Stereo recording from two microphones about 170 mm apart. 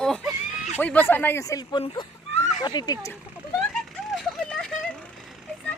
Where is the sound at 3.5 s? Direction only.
Centre (ahead or behind).